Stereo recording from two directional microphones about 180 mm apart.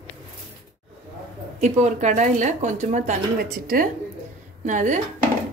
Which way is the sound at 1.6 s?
40° right (ahead or behind).